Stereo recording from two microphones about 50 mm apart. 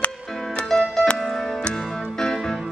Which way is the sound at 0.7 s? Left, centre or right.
Centre.